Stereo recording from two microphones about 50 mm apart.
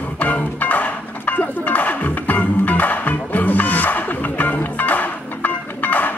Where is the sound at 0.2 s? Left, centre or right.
Left.